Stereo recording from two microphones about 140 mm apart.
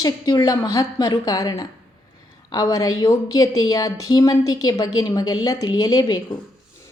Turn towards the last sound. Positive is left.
turn(degrees=30)  # may be behind; listen again after turning